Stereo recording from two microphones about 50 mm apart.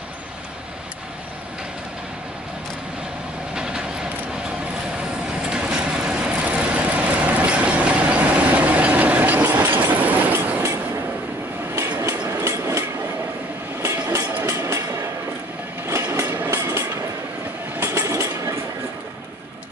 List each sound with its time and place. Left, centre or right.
3.5 s vehicle: centre
5.5 s vehicle: centre; by 10.6 s right
12.0 s train: right
13.8 s train: right
15.9 s train: right
17.8 s a sound: right